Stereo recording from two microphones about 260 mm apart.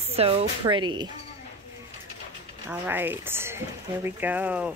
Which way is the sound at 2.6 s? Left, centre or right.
Centre.